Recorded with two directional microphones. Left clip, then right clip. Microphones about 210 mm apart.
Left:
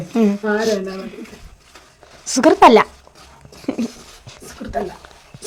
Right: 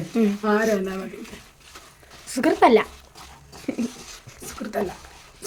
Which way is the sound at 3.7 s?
15° left (ahead or behind).